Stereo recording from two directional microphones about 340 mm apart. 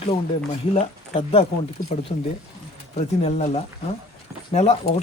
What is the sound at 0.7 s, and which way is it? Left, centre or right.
Speech, centre.